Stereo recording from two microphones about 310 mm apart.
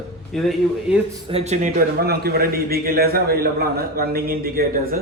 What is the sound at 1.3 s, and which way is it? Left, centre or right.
A man's voice, right.